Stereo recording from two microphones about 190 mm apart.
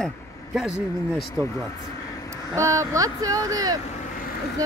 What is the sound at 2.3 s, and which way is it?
Speech, 15° right (ahead or behind).